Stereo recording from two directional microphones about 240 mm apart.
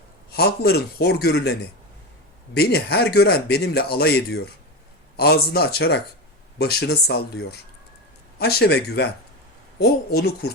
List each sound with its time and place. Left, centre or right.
0.3 s speech: left
2.6 s speech: left